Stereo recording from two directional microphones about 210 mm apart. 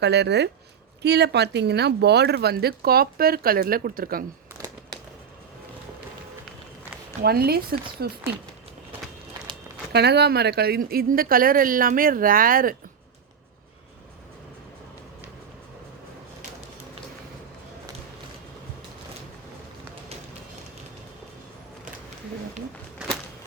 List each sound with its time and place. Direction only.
0.0 s speech: 55° right (ahead or behind)
7.2 s speech: 45° right (ahead or behind)
9.9 s speech: 50° right (ahead or behind)